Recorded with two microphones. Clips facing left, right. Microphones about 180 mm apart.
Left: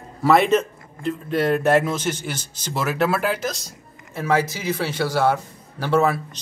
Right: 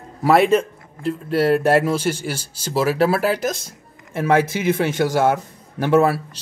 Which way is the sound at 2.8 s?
35° right (ahead or behind).